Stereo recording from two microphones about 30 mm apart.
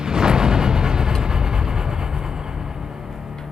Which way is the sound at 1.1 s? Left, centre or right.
Right.